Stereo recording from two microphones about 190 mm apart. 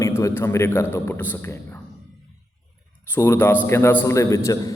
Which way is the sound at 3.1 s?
10° left (ahead or behind).